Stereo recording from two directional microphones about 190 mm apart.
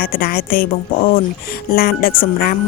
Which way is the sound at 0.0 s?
50° left (ahead or behind).